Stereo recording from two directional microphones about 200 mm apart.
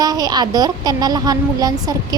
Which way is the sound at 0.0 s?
20° right (ahead or behind).